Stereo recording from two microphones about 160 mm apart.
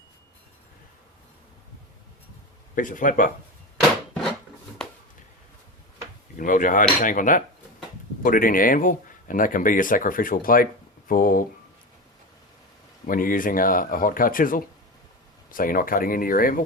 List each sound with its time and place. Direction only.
2.7 s speech: 55° left (ahead or behind)
6.3 s speech: 55° left (ahead or behind)
13.1 s speech: 60° left (ahead or behind)